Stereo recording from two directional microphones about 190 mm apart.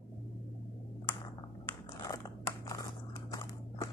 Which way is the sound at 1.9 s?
20° left (ahead or behind).